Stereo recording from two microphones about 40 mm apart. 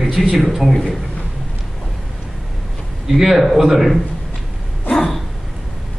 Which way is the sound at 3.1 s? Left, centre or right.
Centre.